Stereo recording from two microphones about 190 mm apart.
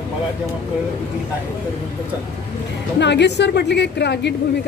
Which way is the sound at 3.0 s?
65° left (ahead or behind).